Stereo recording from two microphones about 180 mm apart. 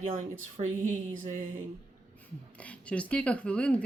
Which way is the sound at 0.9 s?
45° right (ahead or behind).